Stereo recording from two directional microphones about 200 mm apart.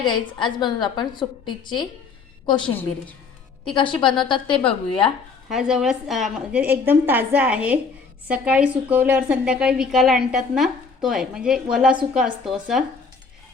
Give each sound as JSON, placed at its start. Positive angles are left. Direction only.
{"t": 0.3, "sound": "a woman's voice", "side_deg": 25}
{"t": 3.8, "sound": "a woman's voice", "side_deg": 25}
{"t": 5.5, "sound": "a woman's voice", "side_deg": 0}